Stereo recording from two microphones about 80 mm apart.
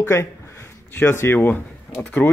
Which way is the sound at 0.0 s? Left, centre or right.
Left.